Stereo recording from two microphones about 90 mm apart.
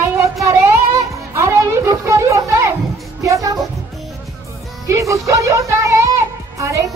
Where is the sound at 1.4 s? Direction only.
35° right (ahead or behind).